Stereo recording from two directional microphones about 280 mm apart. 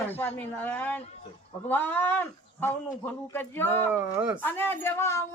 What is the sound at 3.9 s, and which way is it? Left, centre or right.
Speech, centre.